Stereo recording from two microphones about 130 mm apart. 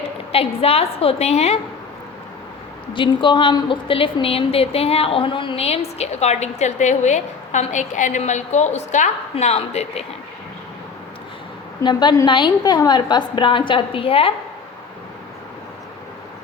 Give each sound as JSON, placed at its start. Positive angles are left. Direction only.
{"t": 0.3, "sound": "a woman's voice", "side_deg": 50}
{"t": 2.9, "sound": "a woman's voice", "side_deg": 40}
{"t": 9.3, "sound": "a woman's voice", "side_deg": 50}
{"t": 11.8, "sound": "a woman's voice", "side_deg": 35}